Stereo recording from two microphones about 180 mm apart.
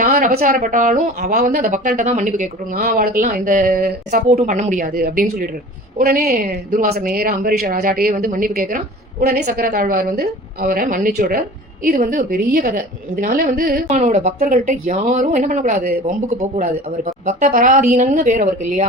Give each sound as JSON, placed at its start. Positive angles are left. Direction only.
{"t": 0.0, "sound": "a sound", "side_deg": -50}
{"t": 0.3, "sound": "speech", "side_deg": -45}
{"t": 9.2, "sound": "speech", "side_deg": -60}
{"t": 13.8, "sound": "speech", "side_deg": -40}